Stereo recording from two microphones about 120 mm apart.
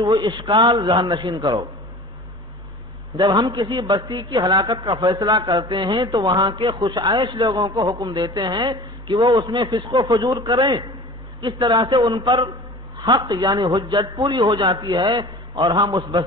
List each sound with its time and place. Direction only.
0.0 s a man's voice: 35° right (ahead or behind)
3.2 s a man's voice: 35° right (ahead or behind)